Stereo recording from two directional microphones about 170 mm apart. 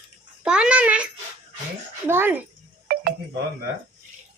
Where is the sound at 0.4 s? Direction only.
5° right (ahead or behind).